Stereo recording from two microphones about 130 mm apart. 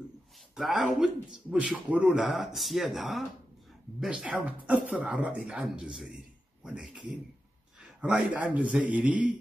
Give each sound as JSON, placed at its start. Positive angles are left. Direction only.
{"t": 0.6, "sound": "a man's voice", "side_deg": 0}
{"t": 8.0, "sound": "speech", "side_deg": -10}